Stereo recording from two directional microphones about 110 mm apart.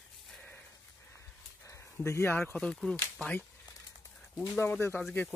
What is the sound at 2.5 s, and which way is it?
Speech, 10° left (ahead or behind).